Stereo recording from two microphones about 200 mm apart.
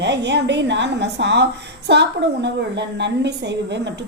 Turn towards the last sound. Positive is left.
turn(degrees=-60)  # may be behind; listen again after turning